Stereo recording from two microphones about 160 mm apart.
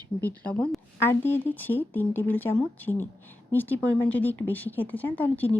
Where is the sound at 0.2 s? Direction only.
10° left (ahead or behind).